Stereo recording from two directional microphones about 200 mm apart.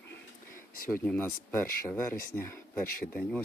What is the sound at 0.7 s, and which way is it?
Speech, 45° left (ahead or behind).